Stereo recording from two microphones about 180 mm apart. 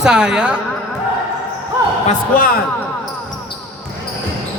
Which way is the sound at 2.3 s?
50° left (ahead or behind).